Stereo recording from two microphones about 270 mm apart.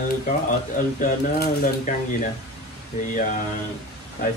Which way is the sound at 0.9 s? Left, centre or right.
Left.